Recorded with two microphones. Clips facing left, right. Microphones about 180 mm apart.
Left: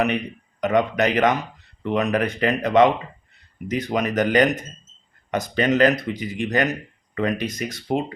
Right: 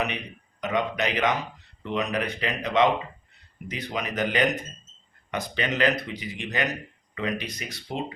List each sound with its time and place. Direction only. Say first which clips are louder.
0.6 s speech: left 7 dB; 50° left (ahead or behind)